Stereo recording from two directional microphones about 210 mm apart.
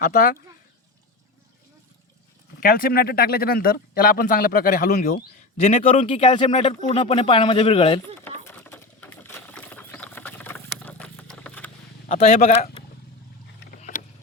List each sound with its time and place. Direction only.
0.0 s speech: 40° left (ahead or behind)
2.6 s speech: 45° left (ahead or behind)
5.5 s speech: 30° left (ahead or behind)
8.4 s a sound: 10° left (ahead or behind)
12.0 s speech: 30° left (ahead or behind)
13.7 s boat: 40° left (ahead or behind)